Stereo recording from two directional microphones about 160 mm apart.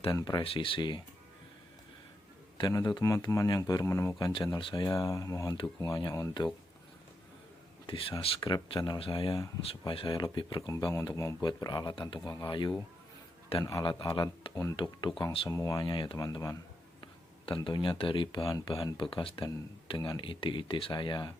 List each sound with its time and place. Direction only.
0.1 s speech: 25° left (ahead or behind)
2.6 s speech: 25° left (ahead or behind)
7.9 s speech: 35° left (ahead or behind)
14.5 s speech: 20° left (ahead or behind)